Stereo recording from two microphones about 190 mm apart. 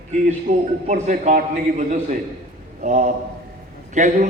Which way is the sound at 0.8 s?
40° right (ahead or behind).